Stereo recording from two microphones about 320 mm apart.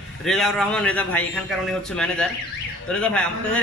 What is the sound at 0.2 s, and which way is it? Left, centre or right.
A man's voice, centre.